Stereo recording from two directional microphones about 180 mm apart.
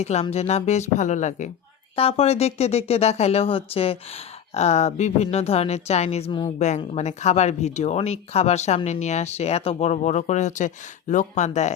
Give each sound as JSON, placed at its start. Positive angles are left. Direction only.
{"t": 0.0, "sound": "speech", "side_deg": 40}